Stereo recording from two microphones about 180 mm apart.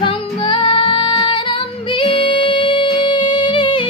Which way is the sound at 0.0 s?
25° left (ahead or behind).